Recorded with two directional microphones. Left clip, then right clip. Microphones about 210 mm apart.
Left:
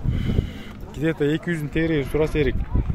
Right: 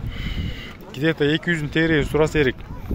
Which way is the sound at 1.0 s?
Centre (ahead or behind).